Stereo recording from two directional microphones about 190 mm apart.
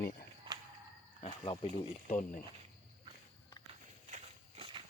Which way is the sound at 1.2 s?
30° left (ahead or behind).